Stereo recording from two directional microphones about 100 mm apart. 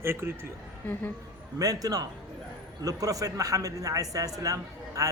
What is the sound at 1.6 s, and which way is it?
Speech, 40° right (ahead or behind).